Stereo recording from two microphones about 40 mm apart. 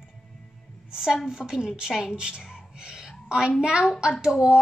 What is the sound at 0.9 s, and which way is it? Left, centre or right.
A woman's voice, centre.